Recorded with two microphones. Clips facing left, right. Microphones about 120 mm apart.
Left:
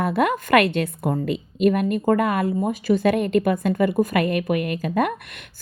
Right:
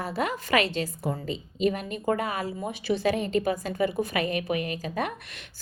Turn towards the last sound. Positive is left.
turn(degrees=55)  # may be behind; listen again after turning